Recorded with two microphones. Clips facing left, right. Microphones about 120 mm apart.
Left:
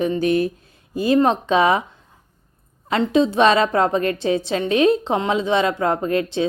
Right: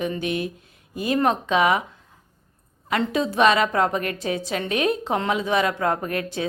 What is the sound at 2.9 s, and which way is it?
A woman's voice, 25° left (ahead or behind).